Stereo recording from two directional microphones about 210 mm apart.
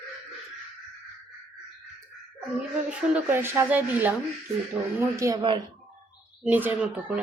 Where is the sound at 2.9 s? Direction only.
10° right (ahead or behind).